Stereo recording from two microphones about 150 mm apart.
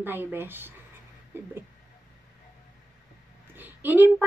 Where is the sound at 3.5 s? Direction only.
10° right (ahead or behind).